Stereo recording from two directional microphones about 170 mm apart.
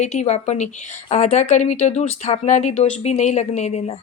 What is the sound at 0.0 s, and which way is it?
Speech, 40° left (ahead or behind).